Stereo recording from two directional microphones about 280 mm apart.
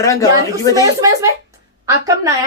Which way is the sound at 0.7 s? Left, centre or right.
Centre.